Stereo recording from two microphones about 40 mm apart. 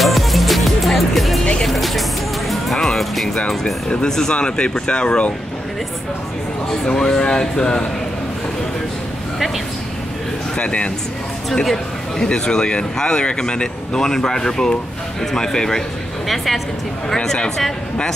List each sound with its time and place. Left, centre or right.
0.0 s music: centre
3.3 s a man's voice: centre
6.9 s a man's voice: centre
10.6 s speech: left
12.2 s a man's voice: left
16.3 s a woman's voice: centre
17.1 s speech: centre